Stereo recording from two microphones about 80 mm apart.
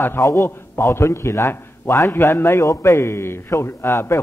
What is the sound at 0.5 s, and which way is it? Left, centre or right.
A man's voice, left.